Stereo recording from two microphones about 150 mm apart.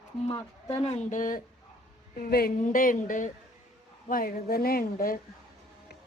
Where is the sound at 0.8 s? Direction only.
45° left (ahead or behind).